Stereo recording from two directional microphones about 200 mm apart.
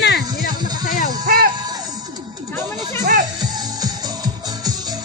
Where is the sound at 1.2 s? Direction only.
45° right (ahead or behind).